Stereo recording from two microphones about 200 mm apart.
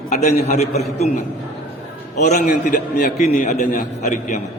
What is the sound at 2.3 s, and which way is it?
A man's voice, 40° left (ahead or behind).